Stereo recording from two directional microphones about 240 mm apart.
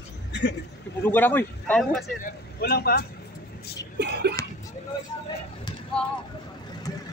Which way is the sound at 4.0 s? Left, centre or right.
Right.